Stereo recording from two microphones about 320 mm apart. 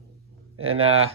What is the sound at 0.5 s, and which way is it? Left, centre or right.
Speech, right.